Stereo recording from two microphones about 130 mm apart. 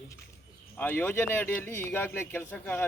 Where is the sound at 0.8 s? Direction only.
15° left (ahead or behind).